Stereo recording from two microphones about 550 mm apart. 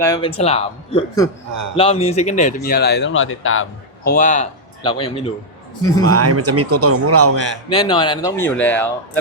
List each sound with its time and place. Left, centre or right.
0.0 s speech: centre
6.1 s a man's voice: right
7.7 s speech: centre